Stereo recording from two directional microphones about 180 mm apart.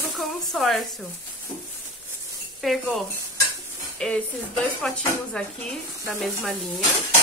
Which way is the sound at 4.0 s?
5° left (ahead or behind).